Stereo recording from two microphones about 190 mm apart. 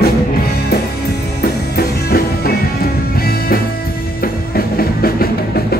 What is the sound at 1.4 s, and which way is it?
Music, 55° left (ahead or behind).